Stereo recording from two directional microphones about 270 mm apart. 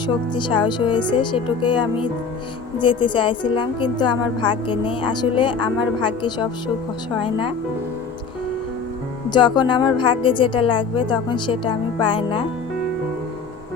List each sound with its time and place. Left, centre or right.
0.3 s a woman's voice: centre
9.3 s a woman's voice: centre